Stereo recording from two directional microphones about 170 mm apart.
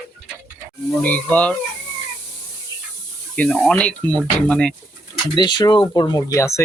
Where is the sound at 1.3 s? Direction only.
5° left (ahead or behind).